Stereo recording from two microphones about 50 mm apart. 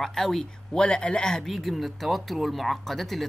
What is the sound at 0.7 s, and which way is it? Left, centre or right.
Speech, centre.